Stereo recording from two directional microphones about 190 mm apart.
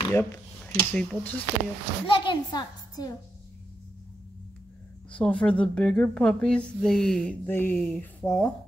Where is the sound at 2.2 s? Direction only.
25° left (ahead or behind).